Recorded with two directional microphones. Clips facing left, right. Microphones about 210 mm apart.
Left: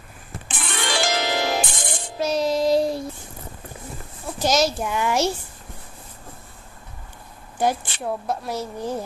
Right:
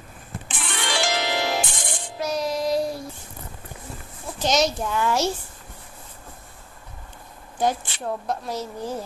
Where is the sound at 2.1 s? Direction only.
25° left (ahead or behind).